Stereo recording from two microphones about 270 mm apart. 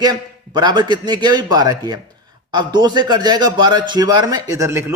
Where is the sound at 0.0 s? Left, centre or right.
Centre.